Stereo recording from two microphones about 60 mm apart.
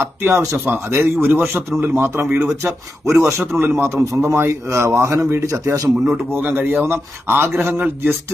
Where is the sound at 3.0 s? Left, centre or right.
Right.